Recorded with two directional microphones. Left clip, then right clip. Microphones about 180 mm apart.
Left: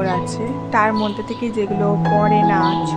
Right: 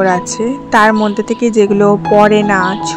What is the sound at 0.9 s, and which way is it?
Speech, 30° right (ahead or behind).